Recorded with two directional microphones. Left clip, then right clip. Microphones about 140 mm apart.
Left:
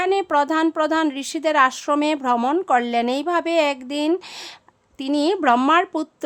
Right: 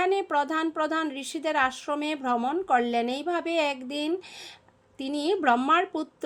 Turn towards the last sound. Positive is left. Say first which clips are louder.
# left 6 dB
turn(degrees=25)  # may be behind; listen again after turning